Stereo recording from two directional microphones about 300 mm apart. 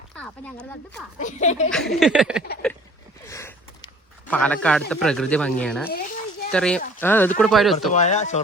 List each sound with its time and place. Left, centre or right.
1.2 s speech: left
1.7 s speech: centre
2.6 s a sound: centre
4.3 s speech: centre
7.9 s speech: left